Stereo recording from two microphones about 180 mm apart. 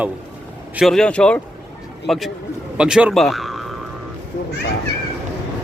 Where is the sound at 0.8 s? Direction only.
Centre (ahead or behind).